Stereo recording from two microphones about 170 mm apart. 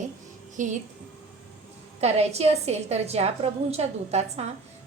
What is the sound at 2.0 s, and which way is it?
A woman's voice, 40° right (ahead or behind).